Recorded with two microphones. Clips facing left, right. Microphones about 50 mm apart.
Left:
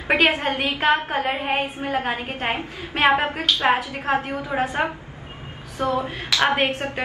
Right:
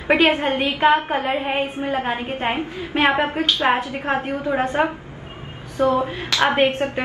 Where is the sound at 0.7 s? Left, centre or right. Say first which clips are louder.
Right 4 dB; centre.